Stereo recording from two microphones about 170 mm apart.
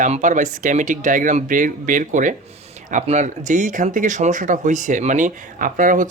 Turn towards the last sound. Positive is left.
turn(degrees=-50)  # may be behind; listen again after turning